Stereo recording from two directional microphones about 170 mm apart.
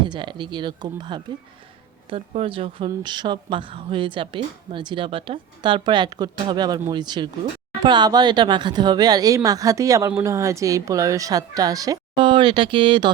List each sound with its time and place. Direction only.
0.0 s speech: 30° right (ahead or behind)
2.0 s speech: 35° right (ahead or behind)